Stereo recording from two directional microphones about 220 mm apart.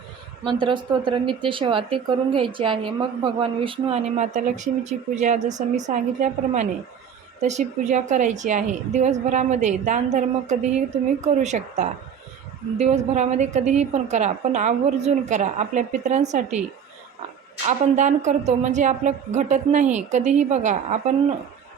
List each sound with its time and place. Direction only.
0.4 s a woman's voice: 20° right (ahead or behind)
17.7 s a woman's voice: 35° right (ahead or behind)